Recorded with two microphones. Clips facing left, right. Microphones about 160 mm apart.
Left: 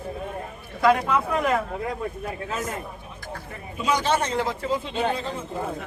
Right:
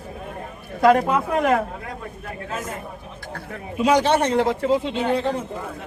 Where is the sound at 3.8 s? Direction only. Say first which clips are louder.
Right 6 dB; 70° right (ahead or behind).